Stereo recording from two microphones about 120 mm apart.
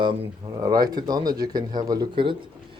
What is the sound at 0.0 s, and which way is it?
Speech, 40° right (ahead or behind).